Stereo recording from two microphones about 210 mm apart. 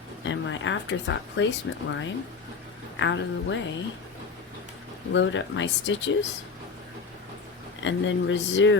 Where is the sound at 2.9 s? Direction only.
60° left (ahead or behind).